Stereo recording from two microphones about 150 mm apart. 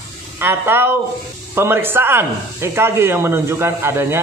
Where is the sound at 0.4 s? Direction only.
15° right (ahead or behind).